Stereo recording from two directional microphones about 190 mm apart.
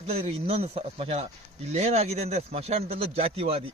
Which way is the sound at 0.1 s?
30° right (ahead or behind).